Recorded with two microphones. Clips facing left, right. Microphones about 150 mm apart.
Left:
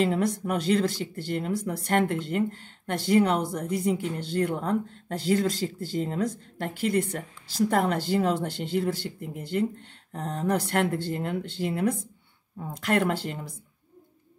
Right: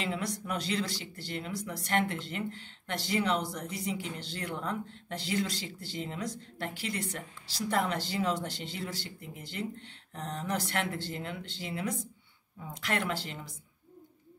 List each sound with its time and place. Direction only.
0.0 s speech: 50° left (ahead or behind)